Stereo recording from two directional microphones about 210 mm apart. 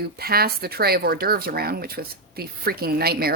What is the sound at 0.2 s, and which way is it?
A woman's voice, 45° right (ahead or behind).